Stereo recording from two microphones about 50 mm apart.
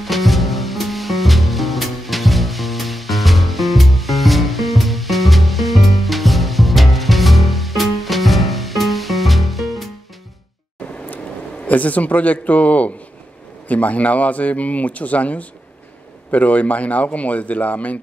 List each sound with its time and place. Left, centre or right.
0.0 s music: centre
11.6 s a man's voice: left